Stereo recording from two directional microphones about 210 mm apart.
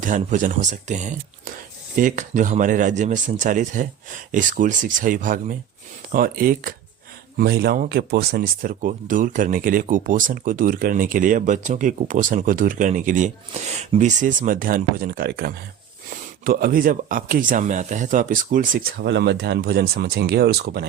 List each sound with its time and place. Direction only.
0.0 s speech: 35° right (ahead or behind)